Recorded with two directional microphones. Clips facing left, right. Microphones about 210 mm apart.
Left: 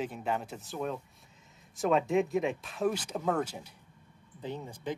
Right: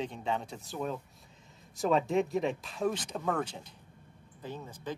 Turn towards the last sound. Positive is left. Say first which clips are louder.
# left 3 dB
turn(degrees=15)  # may be behind; listen again after turning